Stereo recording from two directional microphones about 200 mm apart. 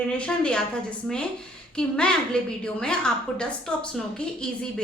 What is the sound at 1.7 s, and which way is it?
A woman's voice, 5° left (ahead or behind).